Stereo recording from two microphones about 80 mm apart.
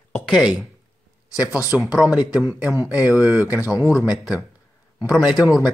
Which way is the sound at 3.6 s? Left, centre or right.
Left.